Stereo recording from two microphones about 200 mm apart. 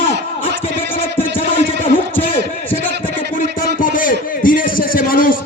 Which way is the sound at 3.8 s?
45° left (ahead or behind).